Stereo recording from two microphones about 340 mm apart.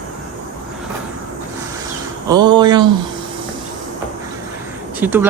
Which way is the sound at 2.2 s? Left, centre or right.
Centre.